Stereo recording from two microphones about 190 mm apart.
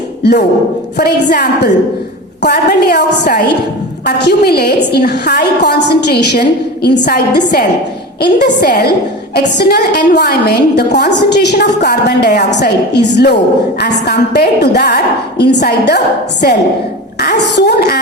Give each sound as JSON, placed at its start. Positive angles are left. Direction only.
{"t": 0.2, "sound": "a woman's voice", "side_deg": 60}